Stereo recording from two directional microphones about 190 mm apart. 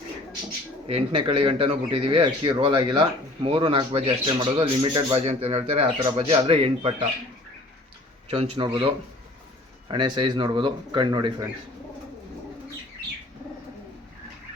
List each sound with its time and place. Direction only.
0.9 s a man's voice: 30° right (ahead or behind)
8.3 s a man's voice: 30° right (ahead or behind)
9.9 s a man's voice: 25° right (ahead or behind)